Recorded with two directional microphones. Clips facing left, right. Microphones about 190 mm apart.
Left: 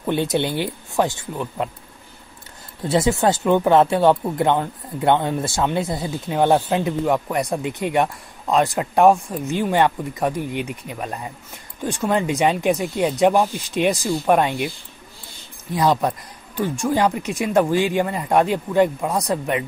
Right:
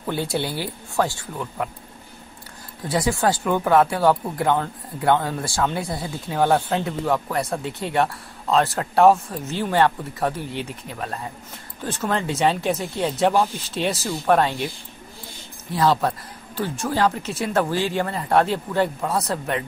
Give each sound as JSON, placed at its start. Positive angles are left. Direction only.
{"t": 0.0, "sound": "speech", "side_deg": 20}
{"t": 2.9, "sound": "speech", "side_deg": 25}
{"t": 15.7, "sound": "speech", "side_deg": 15}